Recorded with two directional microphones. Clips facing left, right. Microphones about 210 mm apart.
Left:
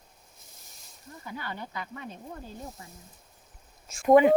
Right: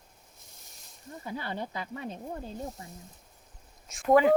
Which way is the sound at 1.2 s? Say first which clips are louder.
Right 3 dB; 30° right (ahead or behind).